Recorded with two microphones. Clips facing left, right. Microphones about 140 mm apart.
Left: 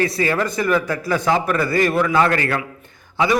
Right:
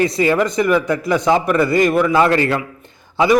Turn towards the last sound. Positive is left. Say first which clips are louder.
# right 4 dB
turn(degrees=-20)  # may be behind; listen again after turning